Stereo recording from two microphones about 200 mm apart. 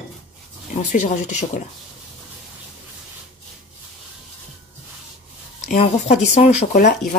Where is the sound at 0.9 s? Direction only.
40° left (ahead or behind).